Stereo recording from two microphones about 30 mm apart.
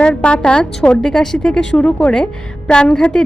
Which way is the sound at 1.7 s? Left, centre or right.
Left.